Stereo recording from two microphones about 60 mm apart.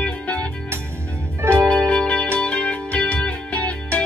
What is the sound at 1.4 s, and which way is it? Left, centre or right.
Music, right.